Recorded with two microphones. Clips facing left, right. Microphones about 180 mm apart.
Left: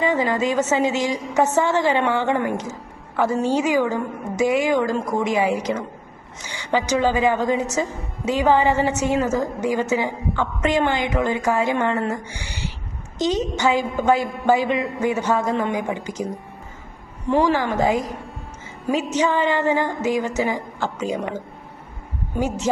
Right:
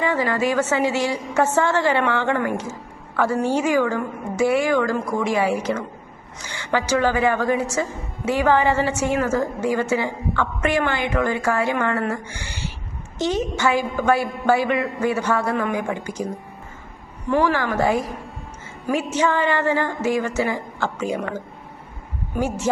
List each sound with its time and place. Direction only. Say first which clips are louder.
0.0 s a woman's voice: left 1 dB; 15° left (ahead or behind)
19.1 s a woman's voice: even; 15° left (ahead or behind)
22.4 s a woman's voice: even; 15° left (ahead or behind)